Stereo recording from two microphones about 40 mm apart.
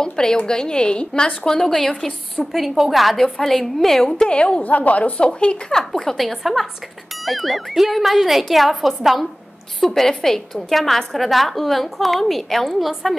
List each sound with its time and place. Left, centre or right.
0.0 s a woman's voice: centre
1.6 s a woman's voice: centre
2.5 s a woman's voice: centre
3.2 s a woman's voice: centre
4.3 s a woman's voice: left
4.6 s a woman's voice: left
5.2 s a woman's voice: left
5.8 s a woman's voice: centre
6.1 s a woman's voice: centre